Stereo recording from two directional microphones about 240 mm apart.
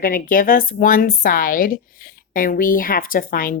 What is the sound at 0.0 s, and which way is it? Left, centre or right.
Speech, left.